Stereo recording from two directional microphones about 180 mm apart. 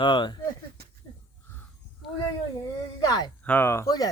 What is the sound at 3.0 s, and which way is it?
Speech, 20° left (ahead or behind).